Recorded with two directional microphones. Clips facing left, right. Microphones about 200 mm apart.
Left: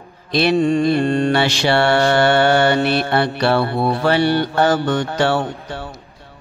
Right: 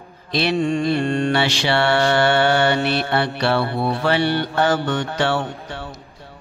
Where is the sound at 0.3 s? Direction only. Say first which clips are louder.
Left 4 dB; 45° left (ahead or behind).